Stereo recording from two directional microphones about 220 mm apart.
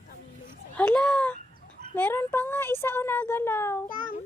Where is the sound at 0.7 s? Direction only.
5° left (ahead or behind).